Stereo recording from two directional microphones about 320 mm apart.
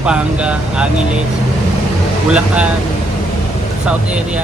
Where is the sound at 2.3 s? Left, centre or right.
Centre.